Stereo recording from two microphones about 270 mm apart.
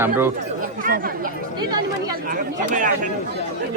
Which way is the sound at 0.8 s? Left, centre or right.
Right.